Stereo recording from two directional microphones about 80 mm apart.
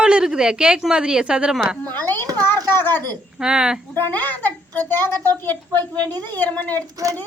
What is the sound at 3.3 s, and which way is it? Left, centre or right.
Speech, centre.